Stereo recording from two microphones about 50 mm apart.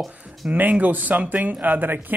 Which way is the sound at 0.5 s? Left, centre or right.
Right.